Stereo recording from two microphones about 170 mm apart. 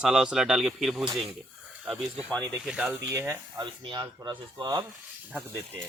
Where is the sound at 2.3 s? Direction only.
10° left (ahead or behind).